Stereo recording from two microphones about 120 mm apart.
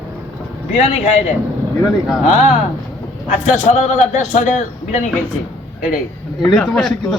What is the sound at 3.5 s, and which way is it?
A man's voice, 75° left (ahead or behind).